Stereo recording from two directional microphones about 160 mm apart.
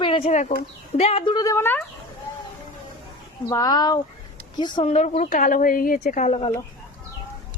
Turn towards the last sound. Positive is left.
turn(degrees=45)  # may be behind; listen again after turning